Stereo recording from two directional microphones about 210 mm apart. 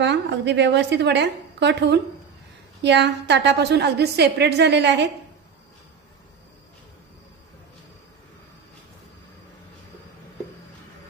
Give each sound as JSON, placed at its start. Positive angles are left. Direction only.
{"t": 0.0, "sound": "a woman's voice", "side_deg": -55}